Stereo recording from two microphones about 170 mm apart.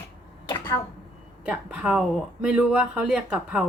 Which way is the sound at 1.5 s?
5° right (ahead or behind).